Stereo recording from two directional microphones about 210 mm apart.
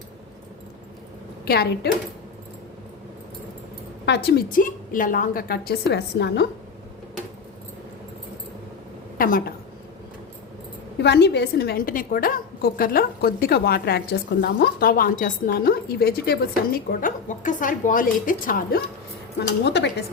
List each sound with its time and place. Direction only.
1.5 s a woman's voice: 50° left (ahead or behind)
4.0 s a woman's voice: 55° left (ahead or behind)
9.1 s a sound: 40° left (ahead or behind)
11.0 s a woman's voice: 55° left (ahead or behind)
19.6 s a woman's voice: 55° left (ahead or behind)